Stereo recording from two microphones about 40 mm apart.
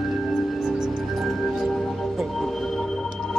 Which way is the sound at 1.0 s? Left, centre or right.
Centre.